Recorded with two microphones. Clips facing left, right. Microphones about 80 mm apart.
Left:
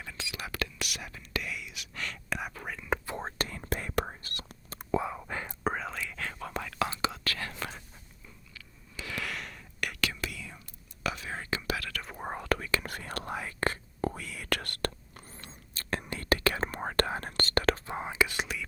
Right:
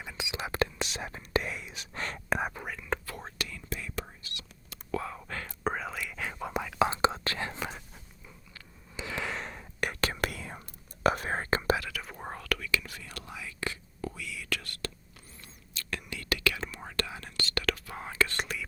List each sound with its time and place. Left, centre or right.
0.0 s speech: centre; by 2.5 s right
2.6 s speech: centre
3.1 s whispering: left
4.9 s whispering: centre
5.6 s whispering: centre; by 7.6 s right
9.0 s whispering: right
10.2 s whispering: right
11.9 s whispering: centre
12.1 s whispering: centre
12.4 s whispering: left
12.8 s whispering: left
15.4 s whispering: left; by 18.6 s centre